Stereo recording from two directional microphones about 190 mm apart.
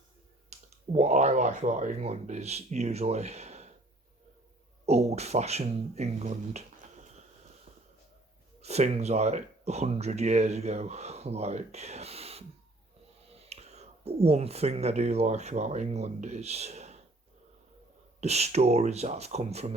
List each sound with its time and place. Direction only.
0.5 s clicking: 35° right (ahead or behind)
0.9 s speech: 35° right (ahead or behind)
4.9 s speech: 35° right (ahead or behind)
8.6 s speech: 35° right (ahead or behind)
18.2 s speech: 35° right (ahead or behind)